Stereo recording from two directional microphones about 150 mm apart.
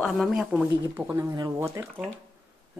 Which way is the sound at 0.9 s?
15° right (ahead or behind).